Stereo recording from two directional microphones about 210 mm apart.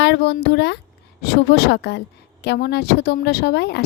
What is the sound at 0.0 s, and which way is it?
Speech, 55° left (ahead or behind).